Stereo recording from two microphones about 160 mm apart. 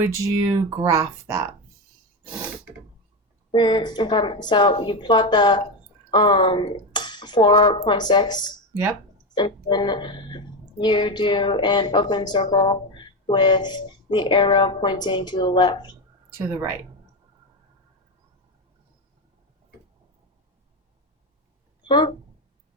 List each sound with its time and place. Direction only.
0.0 s speech: 25° right (ahead or behind)
3.5 s speech: 30° left (ahead or behind)
21.8 s speech: 30° left (ahead or behind)